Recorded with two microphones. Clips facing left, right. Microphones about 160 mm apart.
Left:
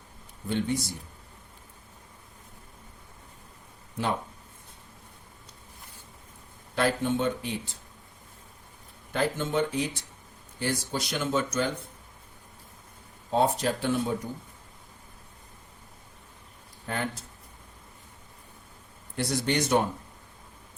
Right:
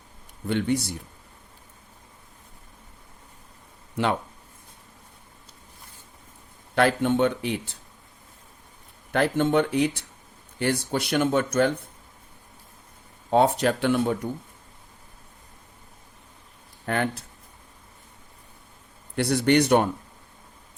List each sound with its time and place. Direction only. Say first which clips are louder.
0.4 s speech: right 4 dB; 65° right (ahead or behind)
4.0 s a man's voice: right 5 dB; 75° right (ahead or behind)
6.7 s a man's voice: right 5 dB; 65° right (ahead or behind)
9.1 s speech: right 6 dB; 65° right (ahead or behind)
13.3 s a man's voice: right 5 dB; 70° right (ahead or behind)
16.8 s speech: right 6 dB; 65° right (ahead or behind)
19.1 s speech: right 7 dB; 65° right (ahead or behind)